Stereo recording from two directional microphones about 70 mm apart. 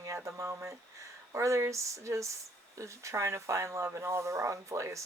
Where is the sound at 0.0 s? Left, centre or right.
Right.